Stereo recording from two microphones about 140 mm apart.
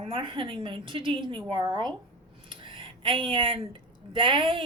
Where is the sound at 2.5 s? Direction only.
40° right (ahead or behind).